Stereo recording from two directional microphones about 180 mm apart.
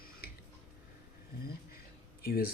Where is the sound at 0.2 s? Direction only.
55° left (ahead or behind).